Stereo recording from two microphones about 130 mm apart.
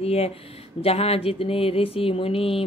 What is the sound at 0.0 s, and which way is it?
Mantra, 50° left (ahead or behind).